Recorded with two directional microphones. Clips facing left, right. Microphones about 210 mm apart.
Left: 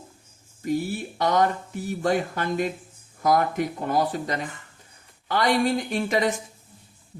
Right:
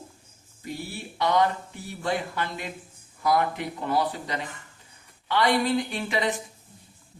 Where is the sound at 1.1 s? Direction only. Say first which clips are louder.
Left 1 dB; 45° left (ahead or behind).